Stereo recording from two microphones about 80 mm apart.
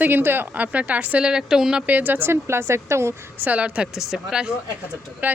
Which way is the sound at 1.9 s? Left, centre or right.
Right.